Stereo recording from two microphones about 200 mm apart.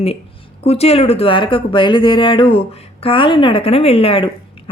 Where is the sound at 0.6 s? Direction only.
30° left (ahead or behind).